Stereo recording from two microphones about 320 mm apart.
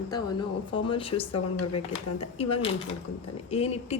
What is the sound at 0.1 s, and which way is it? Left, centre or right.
A woman's voice, centre.